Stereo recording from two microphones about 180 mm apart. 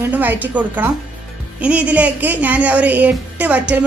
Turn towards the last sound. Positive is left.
turn(degrees=-10)  # may be behind; listen again after turning